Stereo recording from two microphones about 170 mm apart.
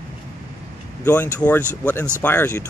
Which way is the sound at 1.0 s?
10° left (ahead or behind).